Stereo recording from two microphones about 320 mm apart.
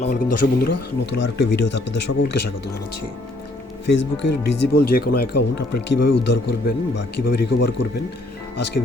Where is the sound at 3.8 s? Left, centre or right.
Left.